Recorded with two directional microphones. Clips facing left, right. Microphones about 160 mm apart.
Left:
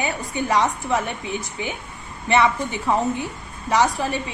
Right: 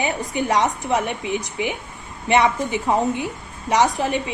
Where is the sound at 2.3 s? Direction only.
15° right (ahead or behind).